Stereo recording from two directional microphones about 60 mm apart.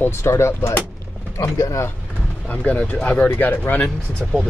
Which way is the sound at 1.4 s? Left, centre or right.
Left.